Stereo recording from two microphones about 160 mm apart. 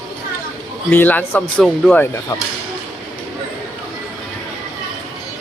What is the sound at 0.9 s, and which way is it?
Speech, 10° left (ahead or behind).